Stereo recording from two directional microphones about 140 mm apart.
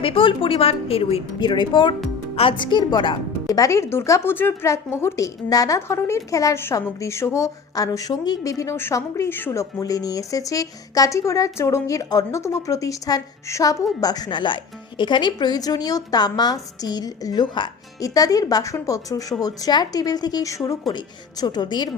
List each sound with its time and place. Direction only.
0.0 s a woman's voice: 40° left (ahead or behind)
1.4 s a woman's voice: 35° left (ahead or behind)